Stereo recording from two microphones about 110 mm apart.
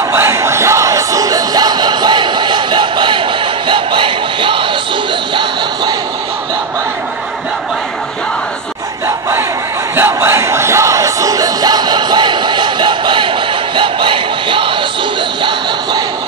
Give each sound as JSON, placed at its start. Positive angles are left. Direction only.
{"t": 0.1, "sound": "music", "side_deg": -25}
{"t": 3.6, "sound": "a sound", "side_deg": -50}
{"t": 9.9, "sound": "music", "side_deg": -20}